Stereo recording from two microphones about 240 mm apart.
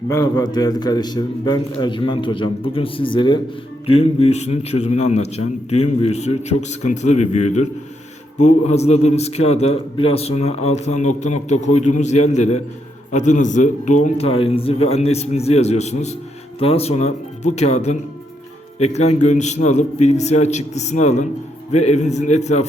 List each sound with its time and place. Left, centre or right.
0.1 s a man's voice: centre